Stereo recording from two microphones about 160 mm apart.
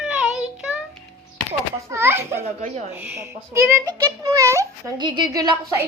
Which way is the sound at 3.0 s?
15° right (ahead or behind).